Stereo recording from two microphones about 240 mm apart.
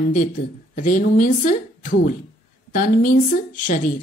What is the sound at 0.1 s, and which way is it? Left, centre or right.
A woman's voice, left.